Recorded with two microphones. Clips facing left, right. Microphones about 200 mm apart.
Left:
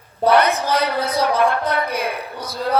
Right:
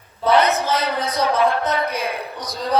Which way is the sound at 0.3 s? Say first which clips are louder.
Left 1 dB; 10° left (ahead or behind).